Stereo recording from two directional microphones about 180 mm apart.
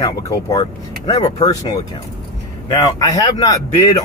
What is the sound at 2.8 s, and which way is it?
Speech, 20° left (ahead or behind).